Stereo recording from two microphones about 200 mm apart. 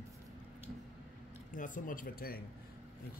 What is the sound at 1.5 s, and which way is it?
Speech, 40° left (ahead or behind).